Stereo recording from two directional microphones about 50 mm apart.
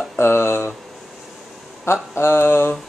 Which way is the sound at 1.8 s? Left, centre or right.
Left.